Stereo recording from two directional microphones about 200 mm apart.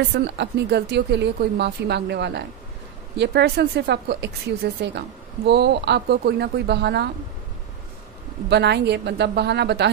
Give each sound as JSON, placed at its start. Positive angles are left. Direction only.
{"t": 0.2, "sound": "a woman's voice", "side_deg": -55}
{"t": 8.5, "sound": "a woman's voice", "side_deg": -55}